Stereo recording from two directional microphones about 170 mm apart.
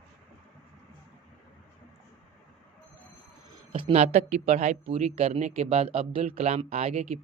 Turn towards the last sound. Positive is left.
turn(degrees=-40)  # may be behind; listen again after turning